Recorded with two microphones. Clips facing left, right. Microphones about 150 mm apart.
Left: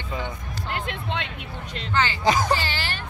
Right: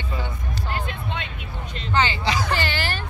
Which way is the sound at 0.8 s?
80° left.